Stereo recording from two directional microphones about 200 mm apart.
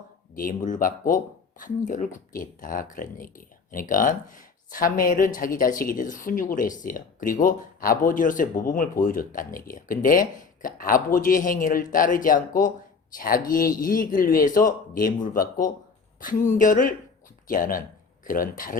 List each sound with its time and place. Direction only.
0.3 s speech: 40° left (ahead or behind)